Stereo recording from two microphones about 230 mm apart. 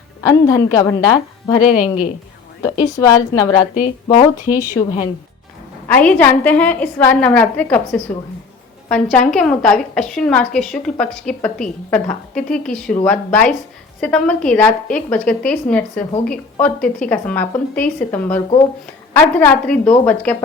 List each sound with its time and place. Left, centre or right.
0.3 s a woman's voice: centre
1.6 s a woman's voice: centre
2.6 s a woman's voice: centre
4.8 s a woman's voice: centre